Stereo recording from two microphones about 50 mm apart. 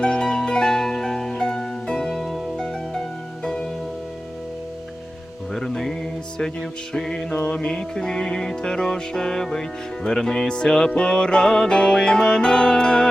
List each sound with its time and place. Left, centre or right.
0.0 s music: centre
3.4 s music: centre
5.5 s music: centre
7.3 s music: left